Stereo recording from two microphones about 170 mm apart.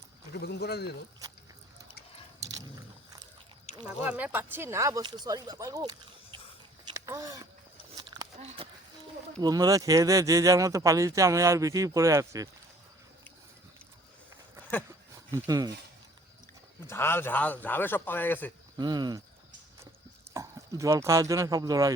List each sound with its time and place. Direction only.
0.3 s speech: 70° left (ahead or behind)
3.7 s a sound: 40° left (ahead or behind)
4.0 s speech: 10° right (ahead or behind)
6.8 s a sound: 20° right (ahead or behind)
8.4 s speech: 40° right (ahead or behind)
9.4 s speech: 20° right (ahead or behind)
15.3 s speech: 20° right (ahead or behind)
16.8 s a man's voice: 15° left (ahead or behind)
18.8 s speech: 25° right (ahead or behind)
20.3 s speech: 20° right (ahead or behind)